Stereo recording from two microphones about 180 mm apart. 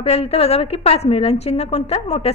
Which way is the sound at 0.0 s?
35° left (ahead or behind).